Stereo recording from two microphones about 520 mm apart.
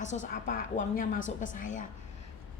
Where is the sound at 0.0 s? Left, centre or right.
Centre.